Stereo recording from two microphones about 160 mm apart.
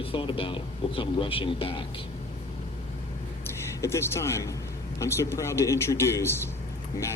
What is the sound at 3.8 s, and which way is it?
Speech, 15° left (ahead or behind).